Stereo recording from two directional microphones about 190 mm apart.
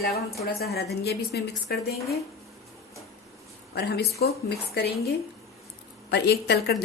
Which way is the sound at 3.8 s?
55° left (ahead or behind).